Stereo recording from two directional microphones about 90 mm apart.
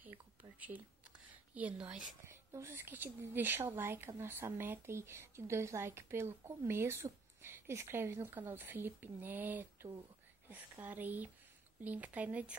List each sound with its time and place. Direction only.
0.0 s whispering: 20° right (ahead or behind)
1.5 s speech: 15° right (ahead or behind)
2.2 s a woman's voice: 30° right (ahead or behind)